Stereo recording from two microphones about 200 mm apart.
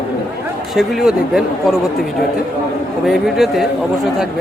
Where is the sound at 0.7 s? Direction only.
Centre (ahead or behind).